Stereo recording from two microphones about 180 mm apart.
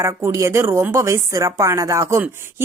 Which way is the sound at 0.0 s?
15° right (ahead or behind).